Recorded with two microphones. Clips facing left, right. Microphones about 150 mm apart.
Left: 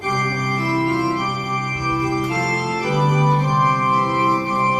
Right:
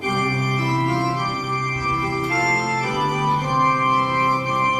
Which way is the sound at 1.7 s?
15° left (ahead or behind).